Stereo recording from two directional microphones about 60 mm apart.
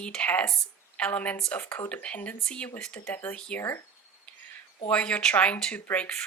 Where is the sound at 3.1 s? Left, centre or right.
Left.